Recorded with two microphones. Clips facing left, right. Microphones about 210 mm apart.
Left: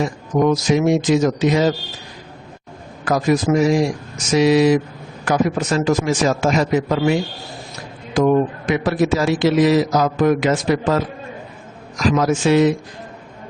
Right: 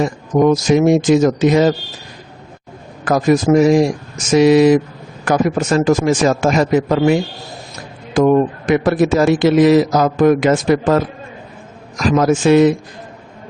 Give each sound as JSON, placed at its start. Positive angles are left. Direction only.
{"t": 0.0, "sound": "a man's voice", "side_deg": -45}
{"t": 3.0, "sound": "a man's voice", "side_deg": -50}
{"t": 12.1, "sound": "a man's voice", "side_deg": -50}